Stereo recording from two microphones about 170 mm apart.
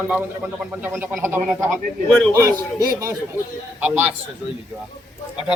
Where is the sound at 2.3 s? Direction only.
20° right (ahead or behind).